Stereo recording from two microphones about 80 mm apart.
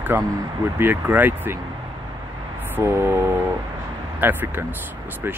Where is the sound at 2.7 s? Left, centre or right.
Right.